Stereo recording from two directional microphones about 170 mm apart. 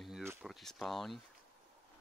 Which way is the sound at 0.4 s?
Centre (ahead or behind).